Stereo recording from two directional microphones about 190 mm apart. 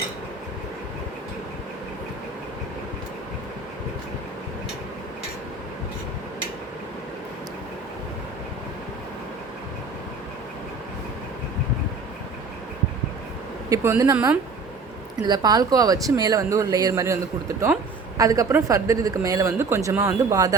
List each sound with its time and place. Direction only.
13.7 s speech: 15° right (ahead or behind)
18.2 s speech: 15° right (ahead or behind)